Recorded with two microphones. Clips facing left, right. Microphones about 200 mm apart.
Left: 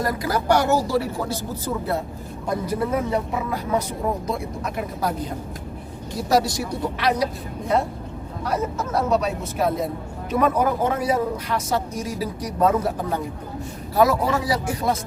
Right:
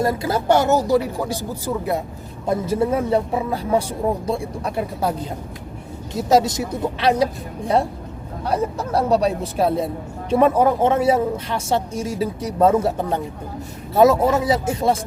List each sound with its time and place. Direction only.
0.0 s speech: 25° right (ahead or behind)
2.5 s speech: 25° right (ahead or behind)
8.4 s speech: 30° right (ahead or behind)